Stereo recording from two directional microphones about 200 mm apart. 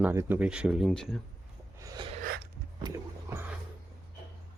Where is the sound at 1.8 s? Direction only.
15° right (ahead or behind).